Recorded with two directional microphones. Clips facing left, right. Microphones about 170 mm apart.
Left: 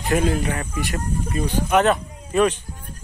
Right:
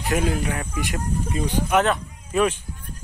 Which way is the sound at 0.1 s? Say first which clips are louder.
Left 3 dB; 5° right (ahead or behind).